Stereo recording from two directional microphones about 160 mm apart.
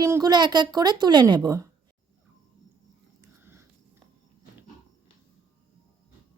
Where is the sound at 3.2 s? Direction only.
15° right (ahead or behind).